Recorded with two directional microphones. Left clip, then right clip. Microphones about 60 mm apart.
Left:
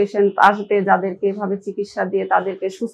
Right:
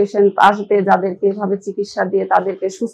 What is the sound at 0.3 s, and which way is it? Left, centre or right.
Speech, centre.